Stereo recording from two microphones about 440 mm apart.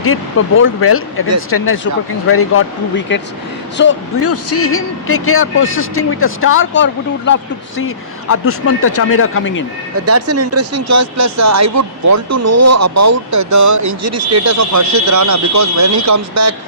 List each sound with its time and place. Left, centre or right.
0.0 s speech: left
10.1 s speech: right